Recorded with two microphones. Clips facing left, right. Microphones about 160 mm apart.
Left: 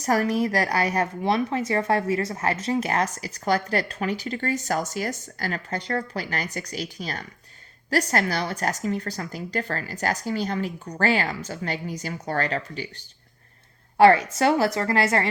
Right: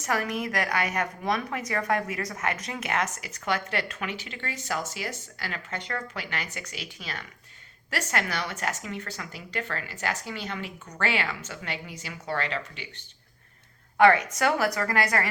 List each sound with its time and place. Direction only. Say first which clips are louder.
0.0 s speech: left 7 dB; 35° left (ahead or behind)
14.0 s a woman's voice: left 4 dB; 30° left (ahead or behind)